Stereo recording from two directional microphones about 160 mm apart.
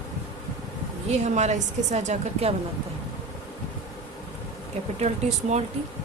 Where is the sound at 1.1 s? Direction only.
45° right (ahead or behind).